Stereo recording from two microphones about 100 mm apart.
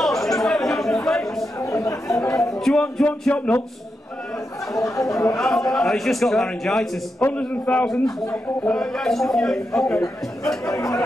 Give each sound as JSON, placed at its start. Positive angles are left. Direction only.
{"t": 0.0, "sound": "chatter", "side_deg": 5}
{"t": 1.0, "sound": "a sound", "side_deg": 5}
{"t": 1.6, "sound": "chatter", "side_deg": 30}
{"t": 2.6, "sound": "music", "side_deg": 5}
{"t": 4.7, "sound": "speech", "side_deg": 35}
{"t": 5.4, "sound": "a man's voice", "side_deg": 5}
{"t": 7.2, "sound": "music", "side_deg": 15}
{"t": 8.6, "sound": "a man's voice", "side_deg": 5}
{"t": 10.6, "sound": "speech", "side_deg": 35}